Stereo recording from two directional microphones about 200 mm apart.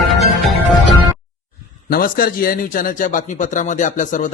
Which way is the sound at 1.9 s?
45° left (ahead or behind).